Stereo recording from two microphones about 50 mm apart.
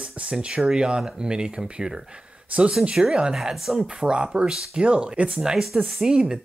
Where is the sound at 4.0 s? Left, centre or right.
Centre.